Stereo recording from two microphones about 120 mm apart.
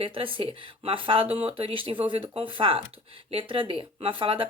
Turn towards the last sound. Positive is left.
turn(degrees=-45)  # may be behind; listen again after turning